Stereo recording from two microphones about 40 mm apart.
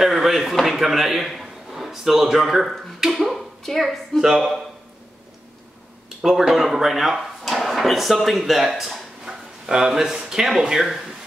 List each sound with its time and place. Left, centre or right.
0.0 s a man's voice: centre
3.2 s speech: centre
4.2 s a man's voice: centre
6.0 s a man's voice: centre